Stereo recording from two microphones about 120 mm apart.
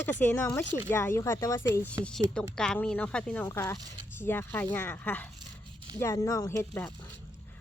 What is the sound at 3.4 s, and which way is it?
Speech, 25° left (ahead or behind).